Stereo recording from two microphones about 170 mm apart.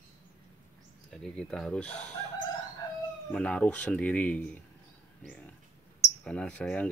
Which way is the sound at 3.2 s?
5° left (ahead or behind).